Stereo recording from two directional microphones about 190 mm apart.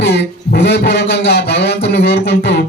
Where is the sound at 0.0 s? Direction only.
65° left (ahead or behind).